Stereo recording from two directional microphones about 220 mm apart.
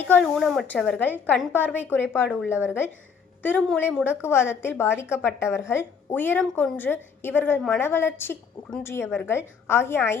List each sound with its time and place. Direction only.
0.0 s a woman's voice: 5° left (ahead or behind)